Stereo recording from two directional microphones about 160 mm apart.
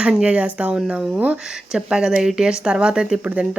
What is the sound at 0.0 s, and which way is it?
Speech, 5° right (ahead or behind).